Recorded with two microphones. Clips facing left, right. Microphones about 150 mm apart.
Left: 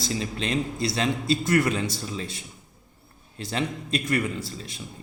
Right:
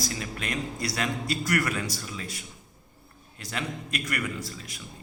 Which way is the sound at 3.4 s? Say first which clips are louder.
Left 5 dB; 30° left (ahead or behind).